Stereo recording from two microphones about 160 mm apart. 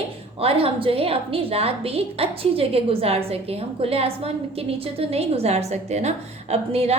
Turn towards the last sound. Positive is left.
turn(degrees=-40)  # may be behind; listen again after turning